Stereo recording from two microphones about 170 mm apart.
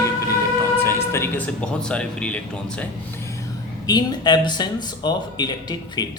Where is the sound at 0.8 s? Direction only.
15° left (ahead or behind).